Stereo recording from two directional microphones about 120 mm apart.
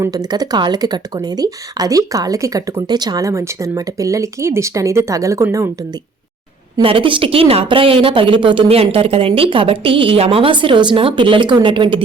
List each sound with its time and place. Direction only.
0.0 s speech: 30° right (ahead or behind)
6.8 s speech: 45° right (ahead or behind)